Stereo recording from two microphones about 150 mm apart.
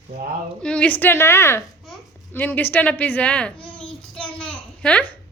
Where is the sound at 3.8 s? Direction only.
Centre (ahead or behind).